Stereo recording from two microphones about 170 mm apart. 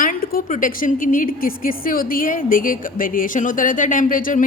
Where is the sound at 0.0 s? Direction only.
55° left (ahead or behind).